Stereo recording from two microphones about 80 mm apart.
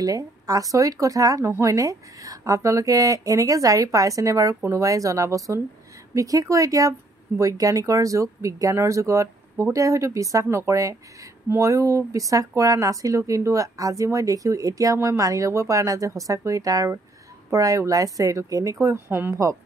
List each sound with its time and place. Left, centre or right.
0.0 s speech: right